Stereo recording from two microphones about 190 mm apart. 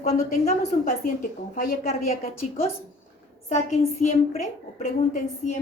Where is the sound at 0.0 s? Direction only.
35° left (ahead or behind).